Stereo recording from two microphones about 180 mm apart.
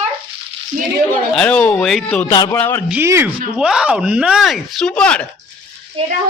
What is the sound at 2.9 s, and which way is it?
Speech, 15° right (ahead or behind).